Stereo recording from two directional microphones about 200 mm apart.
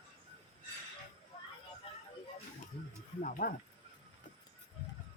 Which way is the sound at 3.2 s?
45° left (ahead or behind).